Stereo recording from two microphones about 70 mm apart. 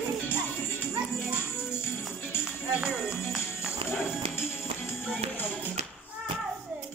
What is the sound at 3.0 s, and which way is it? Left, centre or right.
Music, centre.